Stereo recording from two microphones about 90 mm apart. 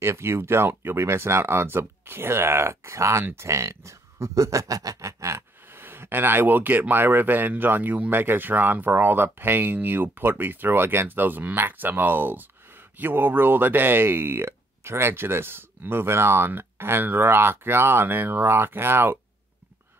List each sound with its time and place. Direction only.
0.0 s speech: 30° right (ahead or behind)